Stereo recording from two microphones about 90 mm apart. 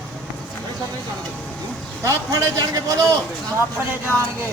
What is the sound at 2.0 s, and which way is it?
A man's voice, 35° right (ahead or behind).